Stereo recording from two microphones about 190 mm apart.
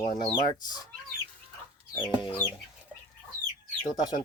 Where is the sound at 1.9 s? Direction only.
20° left (ahead or behind).